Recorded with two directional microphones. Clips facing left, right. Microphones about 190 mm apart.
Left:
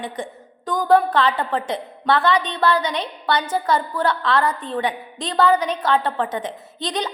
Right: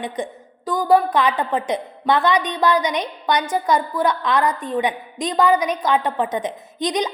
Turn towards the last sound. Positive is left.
turn(degrees=-15)  # may be behind; listen again after turning